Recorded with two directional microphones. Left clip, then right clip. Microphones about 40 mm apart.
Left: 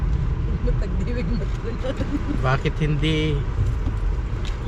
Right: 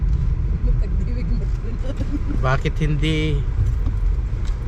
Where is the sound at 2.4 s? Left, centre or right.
Centre.